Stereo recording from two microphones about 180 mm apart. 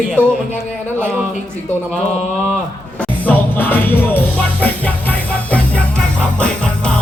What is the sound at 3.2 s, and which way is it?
Music, 10° left (ahead or behind).